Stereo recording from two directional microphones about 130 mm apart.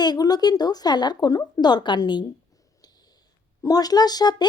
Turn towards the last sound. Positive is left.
turn(degrees=30)  # may be behind; listen again after turning